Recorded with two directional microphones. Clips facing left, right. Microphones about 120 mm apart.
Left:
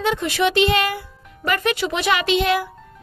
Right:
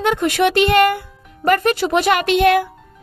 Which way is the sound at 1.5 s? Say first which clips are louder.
Right 6 dB; 45° right (ahead or behind).